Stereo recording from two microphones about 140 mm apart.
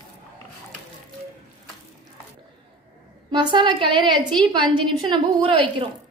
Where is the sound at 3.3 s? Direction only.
35° right (ahead or behind).